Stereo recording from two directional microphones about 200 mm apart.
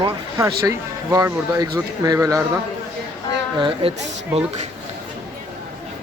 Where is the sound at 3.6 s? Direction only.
25° right (ahead or behind).